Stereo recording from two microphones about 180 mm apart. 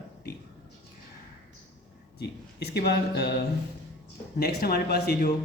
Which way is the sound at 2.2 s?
65° left (ahead or behind).